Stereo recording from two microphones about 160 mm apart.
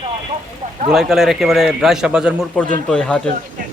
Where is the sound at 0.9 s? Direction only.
5° right (ahead or behind).